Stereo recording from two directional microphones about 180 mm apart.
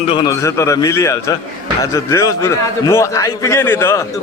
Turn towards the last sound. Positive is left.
turn(degrees=15)  # may be behind; listen again after turning